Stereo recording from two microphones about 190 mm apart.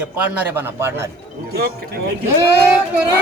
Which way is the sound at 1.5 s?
55° right (ahead or behind).